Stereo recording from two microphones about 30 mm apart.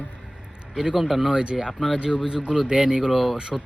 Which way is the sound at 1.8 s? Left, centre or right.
Right.